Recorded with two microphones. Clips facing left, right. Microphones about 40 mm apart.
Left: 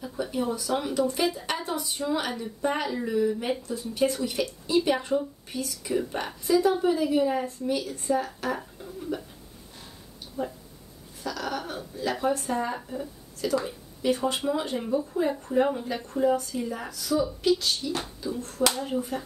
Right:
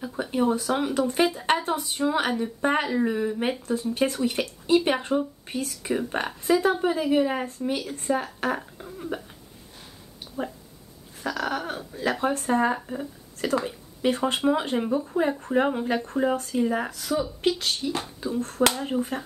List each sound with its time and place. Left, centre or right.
0.0 s a sound: right
0.9 s speech: right
11.2 s speech: right